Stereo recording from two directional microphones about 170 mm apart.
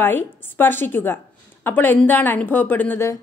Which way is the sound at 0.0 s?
10° left (ahead or behind).